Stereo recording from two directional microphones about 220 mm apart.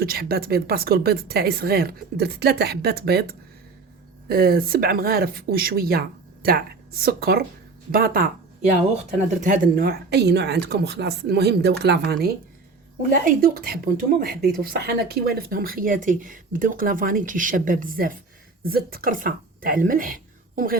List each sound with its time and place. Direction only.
0.0 s speech: 45° right (ahead or behind)
9.4 s speech: 40° right (ahead or behind)